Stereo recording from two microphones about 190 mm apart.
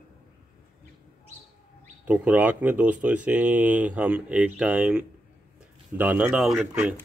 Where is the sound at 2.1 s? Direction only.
10° right (ahead or behind).